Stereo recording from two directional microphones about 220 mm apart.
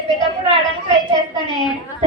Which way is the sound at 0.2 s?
20° left (ahead or behind).